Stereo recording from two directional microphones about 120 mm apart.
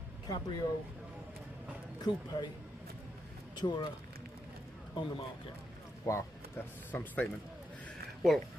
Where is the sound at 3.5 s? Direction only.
35° left (ahead or behind).